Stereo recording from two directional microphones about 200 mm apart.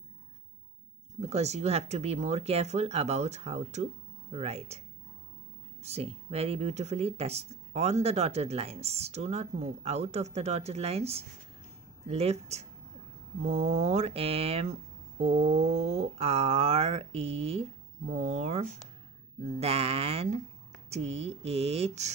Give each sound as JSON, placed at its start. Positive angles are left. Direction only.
{"t": 1.2, "sound": "speech", "side_deg": -35}